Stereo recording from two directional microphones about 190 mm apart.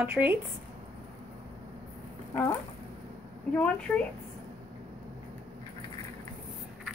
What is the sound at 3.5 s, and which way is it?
Speech, 5° left (ahead or behind).